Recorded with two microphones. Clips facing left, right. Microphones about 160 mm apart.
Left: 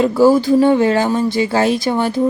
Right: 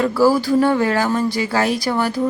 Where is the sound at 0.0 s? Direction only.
20° left (ahead or behind).